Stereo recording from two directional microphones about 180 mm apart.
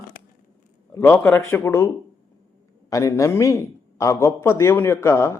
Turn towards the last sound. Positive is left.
turn(degrees=15)  # may be behind; listen again after turning